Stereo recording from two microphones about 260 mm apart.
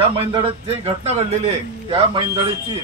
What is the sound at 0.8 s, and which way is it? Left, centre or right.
A man's voice, right.